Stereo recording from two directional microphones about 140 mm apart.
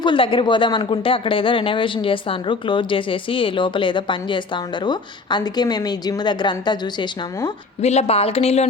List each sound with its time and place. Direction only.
0.0 s speech: 35° left (ahead or behind)
7.8 s speech: 50° left (ahead or behind)